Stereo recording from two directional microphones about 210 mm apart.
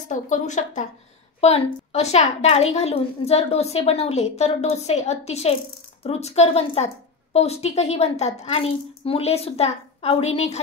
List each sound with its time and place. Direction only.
0.1 s a woman's voice: 35° left (ahead or behind)